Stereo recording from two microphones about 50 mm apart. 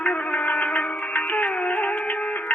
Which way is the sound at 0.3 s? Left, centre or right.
Left.